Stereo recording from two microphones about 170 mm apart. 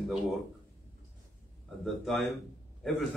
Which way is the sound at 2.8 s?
Centre (ahead or behind).